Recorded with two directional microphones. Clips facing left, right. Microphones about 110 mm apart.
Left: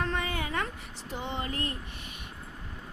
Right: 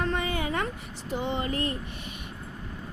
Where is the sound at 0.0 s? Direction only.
15° right (ahead or behind).